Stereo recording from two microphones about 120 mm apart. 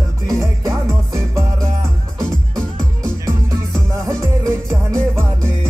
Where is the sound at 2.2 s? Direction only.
30° right (ahead or behind).